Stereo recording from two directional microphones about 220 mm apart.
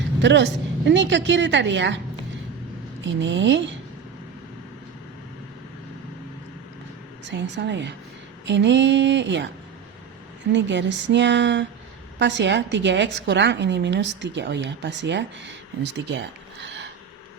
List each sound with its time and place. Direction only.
0.2 s a woman's voice: 55° right (ahead or behind)
3.0 s a woman's voice: 55° right (ahead or behind)
7.3 s a woman's voice: 55° right (ahead or behind)
10.5 s a woman's voice: 55° right (ahead or behind)